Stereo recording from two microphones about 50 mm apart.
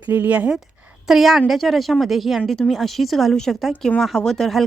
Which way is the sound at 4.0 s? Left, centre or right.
Centre.